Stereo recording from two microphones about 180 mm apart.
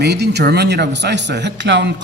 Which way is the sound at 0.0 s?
65° right (ahead or behind).